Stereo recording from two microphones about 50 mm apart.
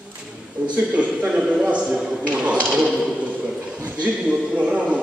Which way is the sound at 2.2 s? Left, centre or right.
Right.